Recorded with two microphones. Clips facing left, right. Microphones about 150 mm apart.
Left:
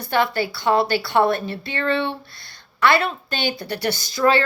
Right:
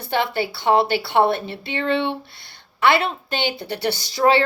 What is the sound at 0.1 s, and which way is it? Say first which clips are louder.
A woman's voice: left 1 dB; 25° right (ahead or behind).